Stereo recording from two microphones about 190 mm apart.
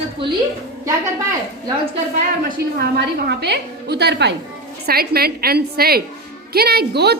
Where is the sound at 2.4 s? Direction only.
60° right (ahead or behind).